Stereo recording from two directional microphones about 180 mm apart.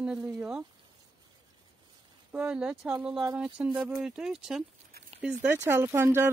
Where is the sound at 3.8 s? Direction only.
5° right (ahead or behind).